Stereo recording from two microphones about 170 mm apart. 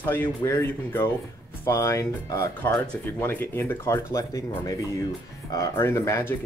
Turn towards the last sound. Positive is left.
turn(degrees=15)  # may be behind; listen again after turning